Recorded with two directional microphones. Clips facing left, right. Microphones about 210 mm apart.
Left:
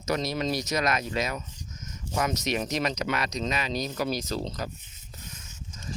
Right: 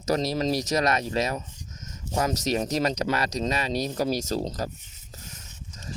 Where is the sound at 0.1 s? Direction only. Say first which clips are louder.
Right 3 dB; 35° right (ahead or behind).